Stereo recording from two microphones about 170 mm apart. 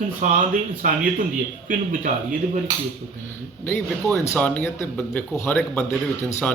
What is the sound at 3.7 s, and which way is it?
Speech, 10° left (ahead or behind).